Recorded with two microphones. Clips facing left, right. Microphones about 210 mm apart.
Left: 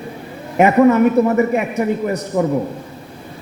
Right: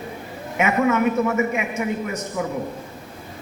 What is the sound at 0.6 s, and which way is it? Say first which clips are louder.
A man's voice: left 8 dB; 35° left (ahead or behind).